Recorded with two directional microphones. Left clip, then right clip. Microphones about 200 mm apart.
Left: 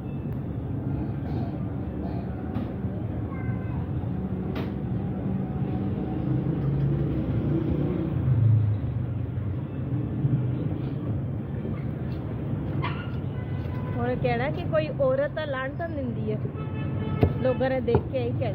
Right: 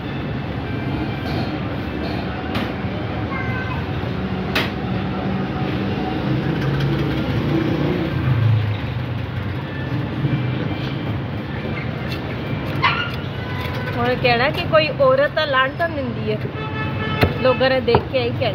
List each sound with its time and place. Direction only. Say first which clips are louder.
14.0 s speech: right 10 dB; 10° right (ahead or behind)
17.2 s speech: right 8 dB; 15° right (ahead or behind)